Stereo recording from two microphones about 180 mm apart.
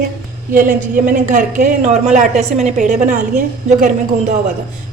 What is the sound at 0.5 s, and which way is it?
Speech, 50° right (ahead or behind).